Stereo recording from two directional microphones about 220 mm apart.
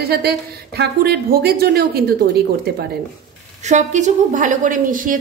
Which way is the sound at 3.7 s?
35° right (ahead or behind).